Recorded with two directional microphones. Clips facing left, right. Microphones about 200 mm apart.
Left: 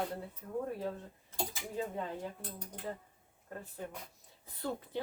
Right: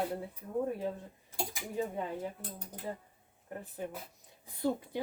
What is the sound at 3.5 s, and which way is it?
A woman's voice, 15° right (ahead or behind).